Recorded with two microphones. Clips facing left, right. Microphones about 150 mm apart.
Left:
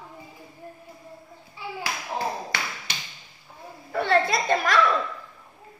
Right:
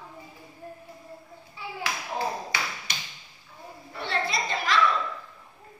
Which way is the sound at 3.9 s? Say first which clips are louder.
Left 8 dB; 55° left (ahead or behind).